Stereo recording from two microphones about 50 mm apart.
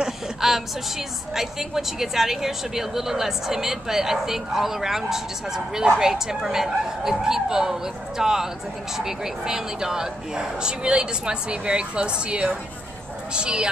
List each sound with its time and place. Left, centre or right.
0.0 s a woman's voice: centre